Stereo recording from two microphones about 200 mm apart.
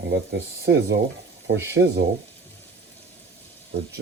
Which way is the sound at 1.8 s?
90° right.